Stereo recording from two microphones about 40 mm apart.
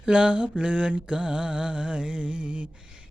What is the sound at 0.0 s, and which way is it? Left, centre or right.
Mantra, right.